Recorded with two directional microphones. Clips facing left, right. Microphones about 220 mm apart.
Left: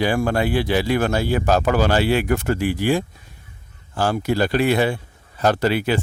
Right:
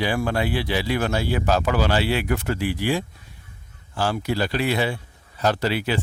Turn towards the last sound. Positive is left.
turn(degrees=50)  # may be behind; listen again after turning